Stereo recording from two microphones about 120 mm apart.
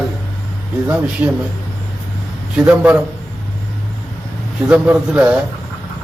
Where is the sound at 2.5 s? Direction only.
10° right (ahead or behind).